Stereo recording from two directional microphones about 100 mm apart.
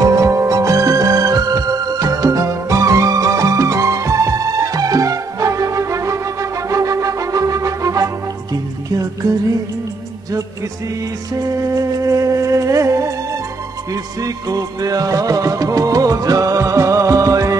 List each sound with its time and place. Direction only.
0.0 s music: 30° right (ahead or behind)
11.7 s music: 35° right (ahead or behind)